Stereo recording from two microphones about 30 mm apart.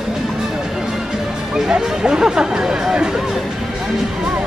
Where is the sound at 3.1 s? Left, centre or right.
Centre.